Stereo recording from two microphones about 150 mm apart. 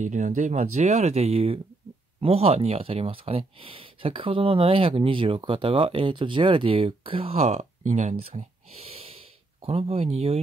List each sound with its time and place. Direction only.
0.0 s speech: 55° right (ahead or behind)